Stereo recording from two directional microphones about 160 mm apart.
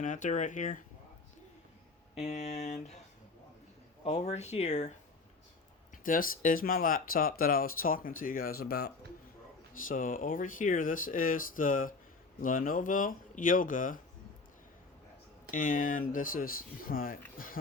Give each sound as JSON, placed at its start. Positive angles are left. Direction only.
{"t": 0.0, "sound": "speech", "side_deg": 50}
{"t": 2.2, "sound": "speech", "side_deg": 45}
{"t": 4.0, "sound": "speech", "side_deg": 45}
{"t": 6.0, "sound": "speech", "side_deg": 60}
{"t": 9.9, "sound": "speech", "side_deg": 60}
{"t": 15.5, "sound": "speech", "side_deg": 55}